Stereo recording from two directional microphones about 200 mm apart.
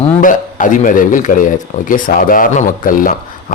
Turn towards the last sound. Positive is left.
turn(degrees=45)  # may be behind; listen again after turning